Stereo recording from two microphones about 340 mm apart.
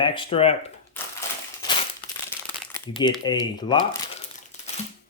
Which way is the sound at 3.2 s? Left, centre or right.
Centre.